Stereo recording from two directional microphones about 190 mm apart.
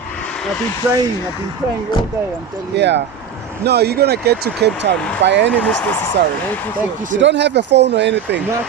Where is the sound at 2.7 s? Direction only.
65° right (ahead or behind).